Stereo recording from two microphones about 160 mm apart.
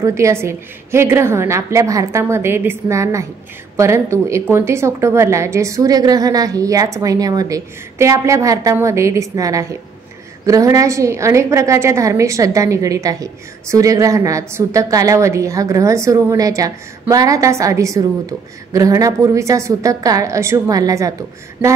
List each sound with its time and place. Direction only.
0.0 s a woman's voice: 15° right (ahead or behind)